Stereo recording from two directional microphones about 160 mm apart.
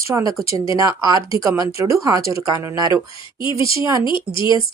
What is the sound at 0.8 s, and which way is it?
Speech, 20° right (ahead or behind).